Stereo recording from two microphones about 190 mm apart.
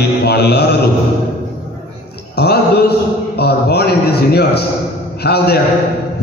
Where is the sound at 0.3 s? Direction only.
60° left (ahead or behind).